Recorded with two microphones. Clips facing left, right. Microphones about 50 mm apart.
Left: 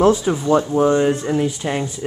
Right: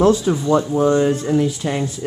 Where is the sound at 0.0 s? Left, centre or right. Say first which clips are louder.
Even; left.